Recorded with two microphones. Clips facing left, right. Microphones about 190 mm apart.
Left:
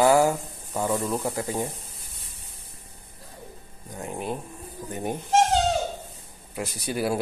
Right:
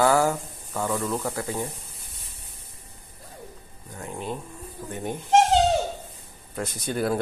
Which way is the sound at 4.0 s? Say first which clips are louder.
Left 2 dB; 15° left (ahead or behind).